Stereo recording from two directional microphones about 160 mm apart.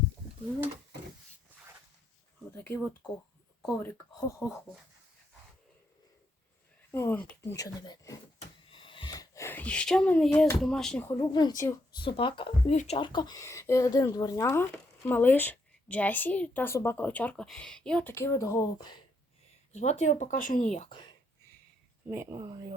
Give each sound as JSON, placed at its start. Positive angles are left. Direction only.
{"t": 2.6, "sound": "speech", "side_deg": 10}
{"t": 6.9, "sound": "speech", "side_deg": 15}
{"t": 8.7, "sound": "a sound", "side_deg": 30}
{"t": 10.6, "sound": "speech", "side_deg": 5}
{"t": 11.3, "sound": "speech", "side_deg": 25}
{"t": 18.1, "sound": "speech", "side_deg": 15}
{"t": 19.7, "sound": "speech", "side_deg": 45}
{"t": 20.9, "sound": "whispering", "side_deg": 30}
{"t": 22.1, "sound": "speech", "side_deg": -20}